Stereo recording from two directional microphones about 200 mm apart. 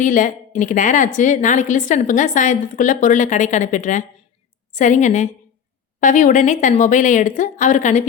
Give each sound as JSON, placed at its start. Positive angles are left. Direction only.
{"t": 0.0, "sound": "a woman's voice", "side_deg": 40}